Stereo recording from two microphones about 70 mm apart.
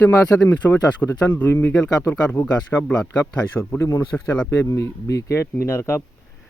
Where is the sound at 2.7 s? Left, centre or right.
Centre.